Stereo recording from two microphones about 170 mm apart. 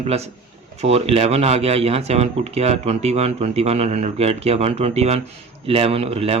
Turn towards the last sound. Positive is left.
turn(degrees=-35)  # may be behind; listen again after turning